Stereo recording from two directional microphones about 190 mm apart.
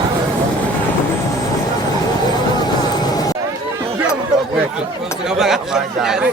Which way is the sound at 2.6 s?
20° left (ahead or behind).